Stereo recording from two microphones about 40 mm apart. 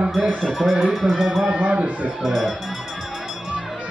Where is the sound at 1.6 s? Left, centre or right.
Right.